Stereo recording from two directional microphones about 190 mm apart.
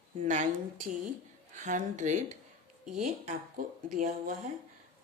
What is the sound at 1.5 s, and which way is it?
Speech, 40° right (ahead or behind).